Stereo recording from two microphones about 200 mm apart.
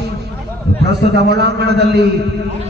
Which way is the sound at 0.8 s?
55° right (ahead or behind).